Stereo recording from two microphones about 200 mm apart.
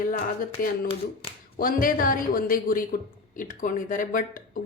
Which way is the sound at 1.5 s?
45° left (ahead or behind).